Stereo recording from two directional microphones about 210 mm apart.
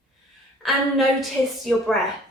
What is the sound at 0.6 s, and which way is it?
A woman's voice, centre (ahead or behind).